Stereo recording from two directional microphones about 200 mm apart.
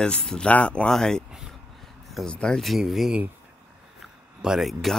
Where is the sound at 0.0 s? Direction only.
5° left (ahead or behind).